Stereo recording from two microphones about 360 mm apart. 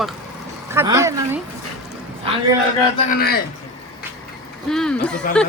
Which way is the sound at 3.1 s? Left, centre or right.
Left.